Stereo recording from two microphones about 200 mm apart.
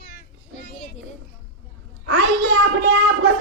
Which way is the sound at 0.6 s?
35° left (ahead or behind).